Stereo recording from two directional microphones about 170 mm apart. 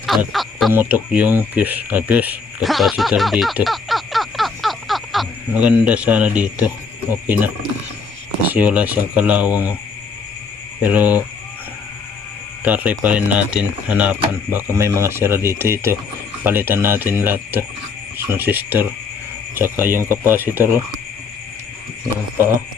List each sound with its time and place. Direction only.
0.0 s a sound: centre (ahead or behind)
0.7 s speech: 10° right (ahead or behind)
8.4 s speech: 10° right (ahead or behind)
10.8 s speech: 10° right (ahead or behind)
12.6 s speech: 10° right (ahead or behind)